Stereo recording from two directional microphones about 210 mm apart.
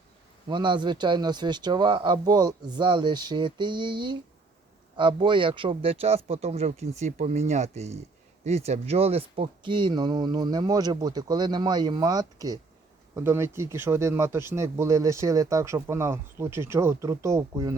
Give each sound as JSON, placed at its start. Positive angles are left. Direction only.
{"t": 0.4, "sound": "a man's voice", "side_deg": -20}